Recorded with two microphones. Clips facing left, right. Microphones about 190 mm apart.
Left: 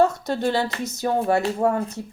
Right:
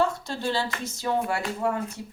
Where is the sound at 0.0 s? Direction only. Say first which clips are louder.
Left 6 dB; 40° left (ahead or behind).